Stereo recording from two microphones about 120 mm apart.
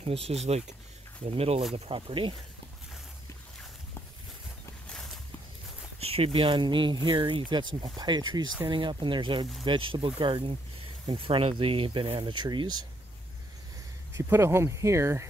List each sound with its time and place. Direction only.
0.0 s speech: 60° right (ahead or behind)
1.9 s speech: 45° right (ahead or behind)
4.8 s a sound: 5° left (ahead or behind)
5.9 s speech: 55° right (ahead or behind); by 12.8 s 35° right (ahead or behind)
14.1 s speech: 20° right (ahead or behind)